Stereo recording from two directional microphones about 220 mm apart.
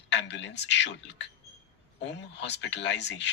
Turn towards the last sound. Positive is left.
turn(degrees=50)  # may be behind; listen again after turning